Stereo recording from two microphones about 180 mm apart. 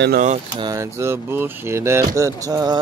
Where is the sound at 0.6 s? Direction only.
20° right (ahead or behind).